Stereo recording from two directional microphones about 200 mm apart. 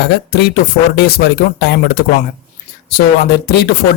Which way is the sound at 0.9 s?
50° left (ahead or behind).